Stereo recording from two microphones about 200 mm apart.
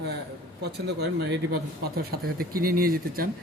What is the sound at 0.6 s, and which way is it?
Speech, 55° right (ahead or behind).